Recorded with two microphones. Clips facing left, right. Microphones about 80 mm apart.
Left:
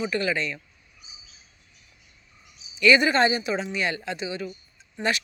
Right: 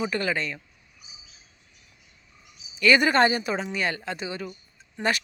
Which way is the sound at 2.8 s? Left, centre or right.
Right.